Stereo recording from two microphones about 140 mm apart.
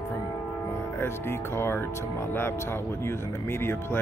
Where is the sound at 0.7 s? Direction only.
15° left (ahead or behind).